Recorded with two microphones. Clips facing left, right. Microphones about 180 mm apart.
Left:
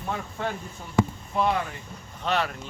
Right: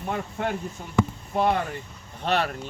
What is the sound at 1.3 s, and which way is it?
Speech, 50° right (ahead or behind).